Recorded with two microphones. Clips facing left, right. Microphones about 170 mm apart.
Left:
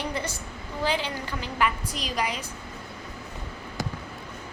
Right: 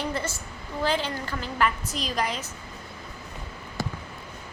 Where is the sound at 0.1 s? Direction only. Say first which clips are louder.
Right 1 dB; 15° left (ahead or behind).